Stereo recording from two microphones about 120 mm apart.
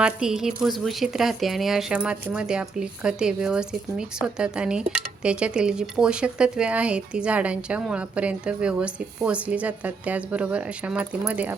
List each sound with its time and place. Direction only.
0.0 s a woman's voice: 5° right (ahead or behind)